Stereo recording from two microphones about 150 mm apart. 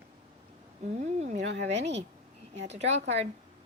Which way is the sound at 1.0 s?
50° right (ahead or behind).